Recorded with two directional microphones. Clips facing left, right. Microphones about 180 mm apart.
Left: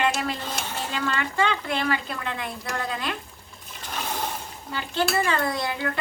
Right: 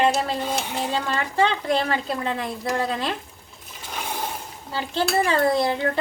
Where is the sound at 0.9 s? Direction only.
30° right (ahead or behind).